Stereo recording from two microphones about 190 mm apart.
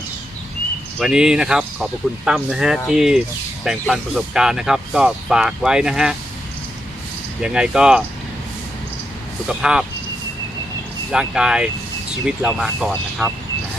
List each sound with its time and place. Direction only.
0.9 s speech: 5° right (ahead or behind)
7.4 s speech: 5° right (ahead or behind)
9.5 s speech: 5° right (ahead or behind)
11.1 s speech: 5° right (ahead or behind)